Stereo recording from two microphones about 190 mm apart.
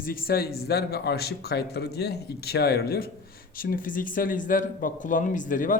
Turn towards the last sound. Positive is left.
turn(degrees=45)  # may be behind; listen again after turning